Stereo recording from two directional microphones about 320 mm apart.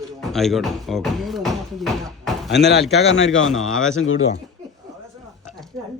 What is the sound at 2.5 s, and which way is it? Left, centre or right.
Speech, left.